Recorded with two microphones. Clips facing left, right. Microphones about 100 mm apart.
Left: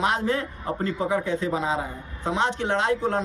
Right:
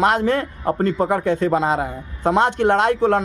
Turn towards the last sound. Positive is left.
turn(degrees=-70)  # may be behind; listen again after turning